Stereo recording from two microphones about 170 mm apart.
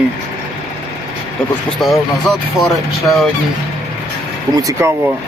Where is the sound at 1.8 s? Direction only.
Centre (ahead or behind).